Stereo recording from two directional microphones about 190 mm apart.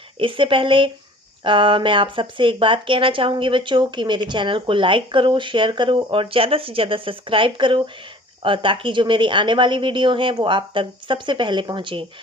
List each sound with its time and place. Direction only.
0.2 s speech: 25° right (ahead or behind)